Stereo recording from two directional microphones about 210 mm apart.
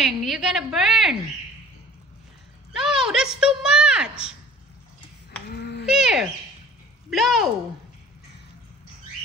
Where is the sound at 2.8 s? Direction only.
5° right (ahead or behind).